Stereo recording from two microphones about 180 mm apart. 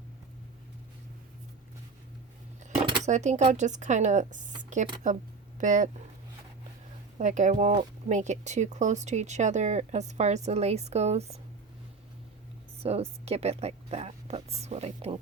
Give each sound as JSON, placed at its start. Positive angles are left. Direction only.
{"t": 3.0, "sound": "speech", "side_deg": -40}
{"t": 7.2, "sound": "speech", "side_deg": -40}
{"t": 12.8, "sound": "speech", "side_deg": -35}